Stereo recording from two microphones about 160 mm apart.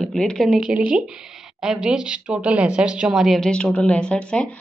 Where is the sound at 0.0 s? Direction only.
5° left (ahead or behind).